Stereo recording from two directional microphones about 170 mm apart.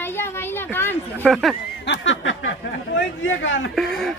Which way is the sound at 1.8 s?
90° left.